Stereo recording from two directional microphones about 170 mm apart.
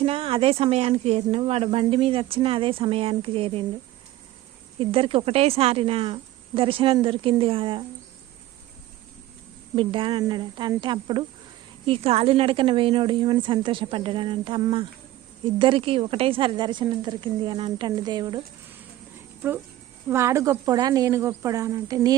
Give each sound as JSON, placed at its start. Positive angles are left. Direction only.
{"t": 0.0, "sound": "speech", "side_deg": -35}
{"t": 4.8, "sound": "speech", "side_deg": -35}
{"t": 9.7, "sound": "speech", "side_deg": -30}
{"t": 19.4, "sound": "speech", "side_deg": -10}